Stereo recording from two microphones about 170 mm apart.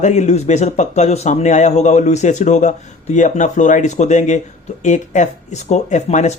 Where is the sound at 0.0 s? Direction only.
40° left (ahead or behind).